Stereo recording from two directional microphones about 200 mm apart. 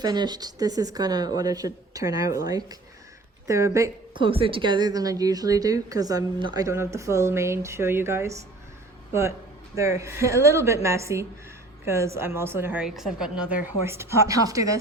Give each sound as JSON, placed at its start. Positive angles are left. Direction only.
{"t": 0.0, "sound": "a woman's voice", "side_deg": -20}
{"t": 9.7, "sound": "a woman's voice", "side_deg": -15}